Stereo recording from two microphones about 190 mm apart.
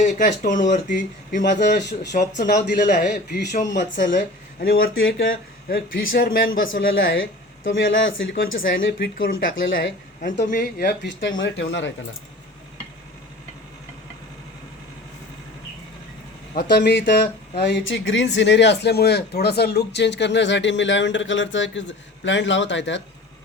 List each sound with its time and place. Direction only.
0.0 s speech: 40° left (ahead or behind)
6.7 s speech: 85° left
10.4 s speech: 60° left (ahead or behind)
16.6 s speech: 60° left (ahead or behind)